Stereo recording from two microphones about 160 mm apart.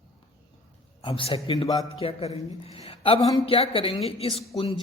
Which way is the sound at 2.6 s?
40° left (ahead or behind).